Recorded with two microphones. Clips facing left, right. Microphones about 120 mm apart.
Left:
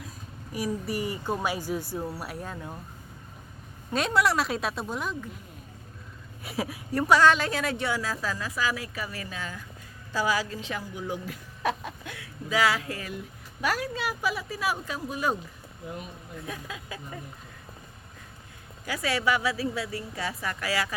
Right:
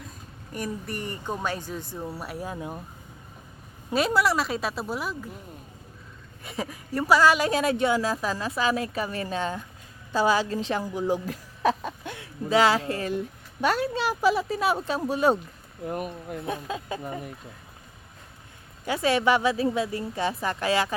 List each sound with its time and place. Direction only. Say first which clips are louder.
0.5 s a woman's voice: left 2 dB; 5° left (ahead or behind)
2.5 s speech: right 4 dB; 15° right (ahead or behind)
3.9 s speech: right 2 dB; 5° right (ahead or behind)
6.4 s speech: left 1 dB; 5° left (ahead or behind)
7.3 s a woman's voice: right 5 dB; 15° right (ahead or behind)
15.9 s speech: right 8 dB; 55° right (ahead or behind)
16.5 s speech: right 7 dB; 30° right (ahead or behind)
18.9 s speech: right 5 dB; 25° right (ahead or behind)